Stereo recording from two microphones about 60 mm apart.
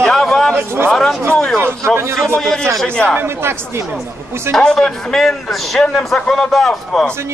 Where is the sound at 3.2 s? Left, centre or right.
Right.